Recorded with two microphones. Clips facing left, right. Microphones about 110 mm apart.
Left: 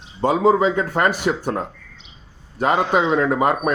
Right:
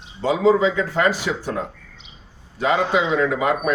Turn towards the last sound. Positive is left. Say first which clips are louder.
# left 2 dB
turn(degrees=45)  # may be behind; listen again after turning